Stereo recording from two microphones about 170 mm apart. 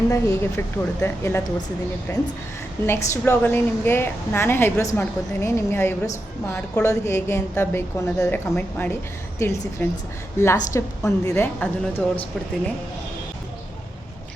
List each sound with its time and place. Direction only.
0.1 s a woman's voice: 15° left (ahead or behind)